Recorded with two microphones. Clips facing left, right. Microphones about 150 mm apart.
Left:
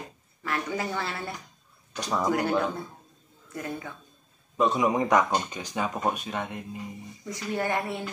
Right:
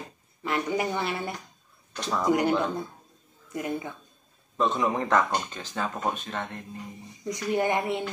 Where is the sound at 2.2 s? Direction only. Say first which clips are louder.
Right 4 dB; 20° right (ahead or behind).